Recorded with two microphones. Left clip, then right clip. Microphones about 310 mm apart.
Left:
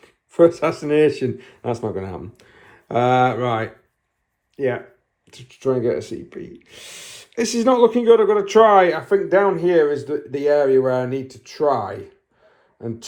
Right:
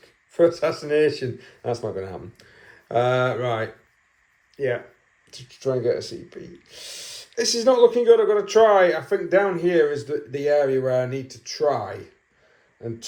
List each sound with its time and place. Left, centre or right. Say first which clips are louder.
0.3 s speech: left 4 dB; centre
11.2 s speech: left 1 dB; left
11.7 s speech: left 4 dB; centre